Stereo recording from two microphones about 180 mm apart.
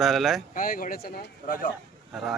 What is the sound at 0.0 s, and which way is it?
Speech, centre (ahead or behind).